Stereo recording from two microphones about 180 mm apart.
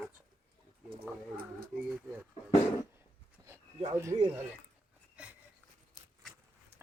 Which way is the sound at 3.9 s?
15° right (ahead or behind).